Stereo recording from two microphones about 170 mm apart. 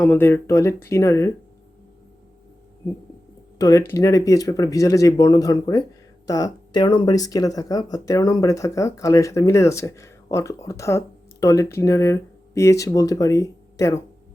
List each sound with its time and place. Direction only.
0.0 s speech: 10° left (ahead or behind)
3.6 s speech: 20° left (ahead or behind)